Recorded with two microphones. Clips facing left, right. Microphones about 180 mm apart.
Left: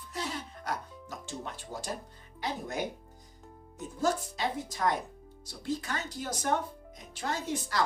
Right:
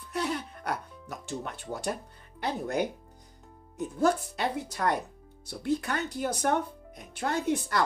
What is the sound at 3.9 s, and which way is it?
Speech, 60° right (ahead or behind).